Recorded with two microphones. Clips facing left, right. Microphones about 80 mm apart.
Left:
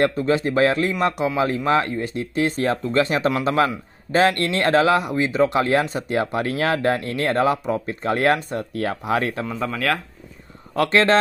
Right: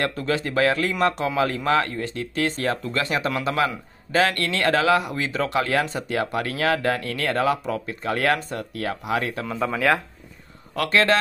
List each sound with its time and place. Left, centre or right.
0.0 s speech: left
1.1 s speech: centre; by 9.5 s left
9.5 s speech: centre
10.8 s a man's voice: left